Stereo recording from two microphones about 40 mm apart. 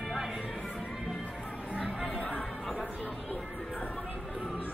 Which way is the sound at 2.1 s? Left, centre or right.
Left.